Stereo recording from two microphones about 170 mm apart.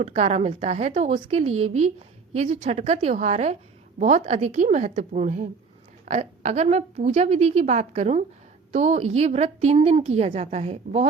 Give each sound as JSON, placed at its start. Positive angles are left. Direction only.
{"t": 0.0, "sound": "a woman's voice", "side_deg": -40}